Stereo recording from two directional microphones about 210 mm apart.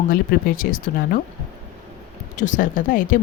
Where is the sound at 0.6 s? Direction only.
40° left (ahead or behind).